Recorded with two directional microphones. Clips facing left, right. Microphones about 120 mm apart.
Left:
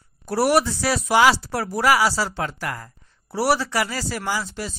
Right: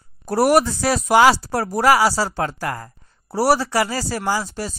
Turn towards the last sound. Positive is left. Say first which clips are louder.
# right 4 dB
turn(degrees=-40)  # may be behind; listen again after turning